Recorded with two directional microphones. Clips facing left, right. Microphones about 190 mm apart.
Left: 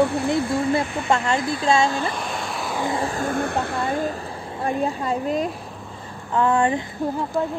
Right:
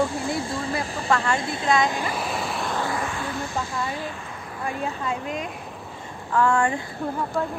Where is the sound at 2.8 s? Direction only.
25° left (ahead or behind).